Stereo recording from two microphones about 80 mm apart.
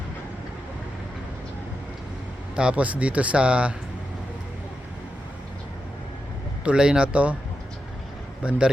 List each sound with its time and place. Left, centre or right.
2.6 s speech: centre
6.7 s speech: centre
8.4 s speech: centre